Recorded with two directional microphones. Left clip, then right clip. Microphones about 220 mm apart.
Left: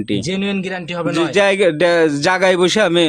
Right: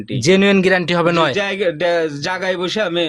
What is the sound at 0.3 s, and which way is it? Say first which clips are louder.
Speech: right 9 dB; 40° right (ahead or behind).